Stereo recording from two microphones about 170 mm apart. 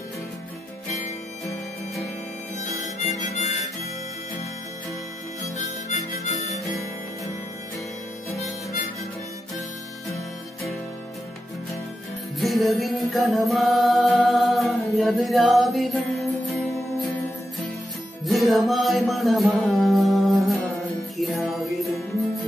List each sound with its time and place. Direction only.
2.8 s harmonica: 45° left (ahead or behind)
5.4 s harmonica: 40° left (ahead or behind)
12.4 s music: centre (ahead or behind)
18.2 s music: centre (ahead or behind)